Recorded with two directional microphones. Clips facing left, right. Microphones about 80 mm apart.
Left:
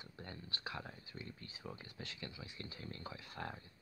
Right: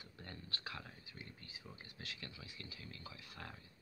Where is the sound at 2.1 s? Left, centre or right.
Centre.